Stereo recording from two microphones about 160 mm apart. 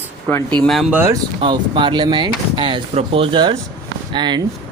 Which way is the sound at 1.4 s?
30° right (ahead or behind).